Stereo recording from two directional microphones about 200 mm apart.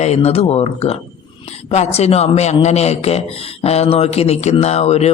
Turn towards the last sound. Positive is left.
turn(degrees=30)  # may be behind; listen again after turning